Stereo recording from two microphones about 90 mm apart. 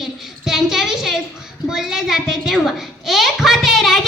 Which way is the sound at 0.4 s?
5° right (ahead or behind).